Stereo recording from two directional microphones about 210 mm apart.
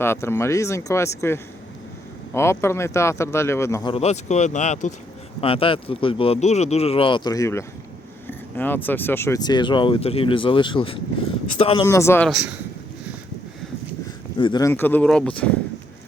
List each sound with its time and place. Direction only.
0.0 s speech: 10° left (ahead or behind)
3.9 s speech: 30° left (ahead or behind); by 12.3 s 10° left (ahead or behind)
12.3 s speech: 5° right (ahead or behind)
14.3 s speech: 20° left (ahead or behind)
14.7 s speech: 10° left (ahead or behind)